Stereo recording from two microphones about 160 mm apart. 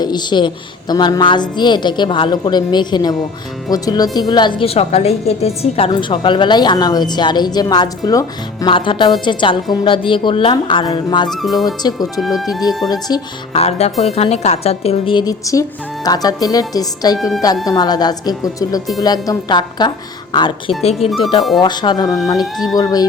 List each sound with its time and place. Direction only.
0.0 s a woman's voice: 25° left (ahead or behind)
11.3 s speech: centre (ahead or behind)
11.6 s a woman's voice: 25° left (ahead or behind)
12.2 s speech: centre (ahead or behind)
12.9 s a woman's voice: 25° left (ahead or behind)
13.6 s a woman's voice: 40° left (ahead or behind); by 22.1 s 25° left (ahead or behind)
22.4 s speech: centre (ahead or behind)
22.8 s a woman's voice: 25° left (ahead or behind)